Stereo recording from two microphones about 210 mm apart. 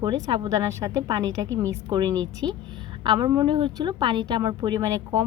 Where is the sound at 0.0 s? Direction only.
20° right (ahead or behind).